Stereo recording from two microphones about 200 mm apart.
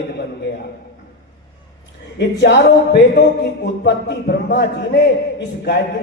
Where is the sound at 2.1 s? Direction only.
55° left (ahead or behind).